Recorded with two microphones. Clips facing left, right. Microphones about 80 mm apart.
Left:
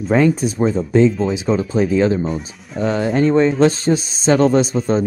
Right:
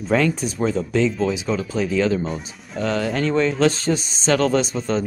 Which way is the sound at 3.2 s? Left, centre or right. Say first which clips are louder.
Left 7 dB; left.